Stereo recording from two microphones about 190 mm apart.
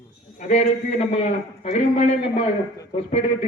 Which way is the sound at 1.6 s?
35° left (ahead or behind).